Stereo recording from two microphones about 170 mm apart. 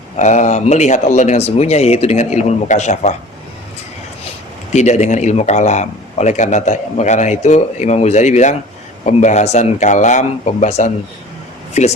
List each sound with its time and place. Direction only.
0.2 s speech: 45° left (ahead or behind)
4.7 s speech: 40° left (ahead or behind)